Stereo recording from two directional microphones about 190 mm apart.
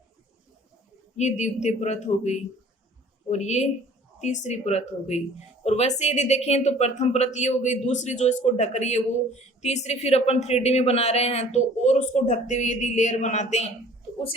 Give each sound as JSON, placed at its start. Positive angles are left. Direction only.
{"t": 1.1, "sound": "speech", "side_deg": 35}